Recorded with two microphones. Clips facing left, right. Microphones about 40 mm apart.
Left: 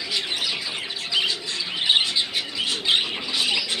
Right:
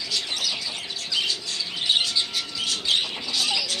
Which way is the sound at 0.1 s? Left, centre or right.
Left.